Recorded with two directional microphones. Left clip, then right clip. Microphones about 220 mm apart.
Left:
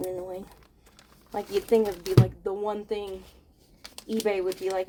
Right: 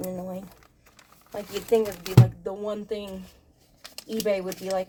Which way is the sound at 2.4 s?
25° left (ahead or behind).